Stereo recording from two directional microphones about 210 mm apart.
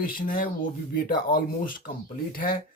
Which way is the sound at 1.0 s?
45° left (ahead or behind).